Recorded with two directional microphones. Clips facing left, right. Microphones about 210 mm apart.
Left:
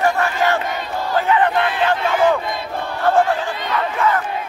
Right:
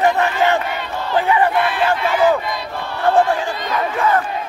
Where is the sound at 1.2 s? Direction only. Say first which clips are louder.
Right 1 dB; 10° right (ahead or behind).